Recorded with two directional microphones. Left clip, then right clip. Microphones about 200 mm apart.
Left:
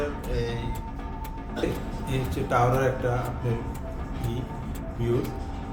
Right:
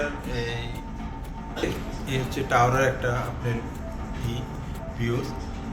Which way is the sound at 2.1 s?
5° left (ahead or behind).